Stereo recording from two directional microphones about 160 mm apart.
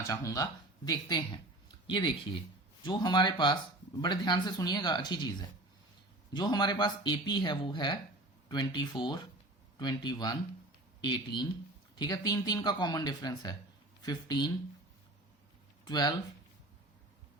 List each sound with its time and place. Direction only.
0.1 s speech: 20° left (ahead or behind)
11.9 s speech: 25° left (ahead or behind)
15.8 s speech: 25° left (ahead or behind)